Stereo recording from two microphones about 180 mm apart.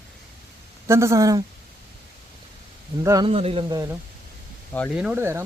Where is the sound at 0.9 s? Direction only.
15° right (ahead or behind).